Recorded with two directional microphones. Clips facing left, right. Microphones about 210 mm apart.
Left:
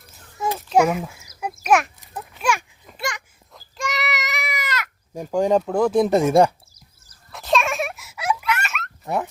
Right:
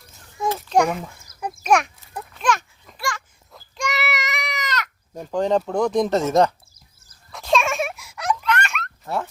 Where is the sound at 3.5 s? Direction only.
Centre (ahead or behind).